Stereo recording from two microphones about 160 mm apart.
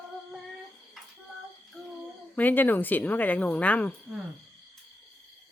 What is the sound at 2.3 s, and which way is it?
Speech, 10° left (ahead or behind).